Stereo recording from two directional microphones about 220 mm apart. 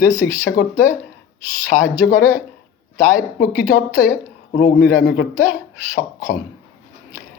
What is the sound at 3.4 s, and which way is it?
A woman's voice, 45° left (ahead or behind).